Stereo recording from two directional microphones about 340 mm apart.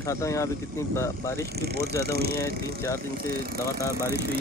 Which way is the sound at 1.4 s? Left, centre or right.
Right.